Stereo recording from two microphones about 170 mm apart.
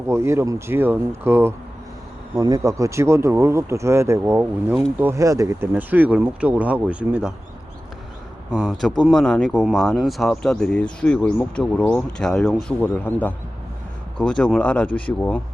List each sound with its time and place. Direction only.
0.1 s speech: 15° right (ahead or behind)
8.4 s speech: 5° right (ahead or behind)